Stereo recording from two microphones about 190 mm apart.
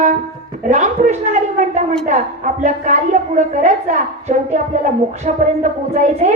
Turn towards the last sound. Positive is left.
turn(degrees=-40)  # may be behind; listen again after turning